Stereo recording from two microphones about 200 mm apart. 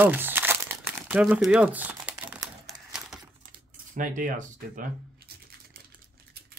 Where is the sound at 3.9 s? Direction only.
40° right (ahead or behind).